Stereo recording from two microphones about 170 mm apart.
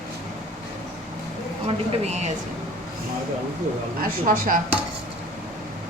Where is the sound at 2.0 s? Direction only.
40° right (ahead or behind).